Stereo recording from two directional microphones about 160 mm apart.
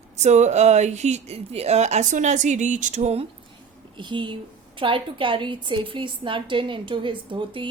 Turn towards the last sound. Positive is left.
turn(degrees=-30)  # may be behind; listen again after turning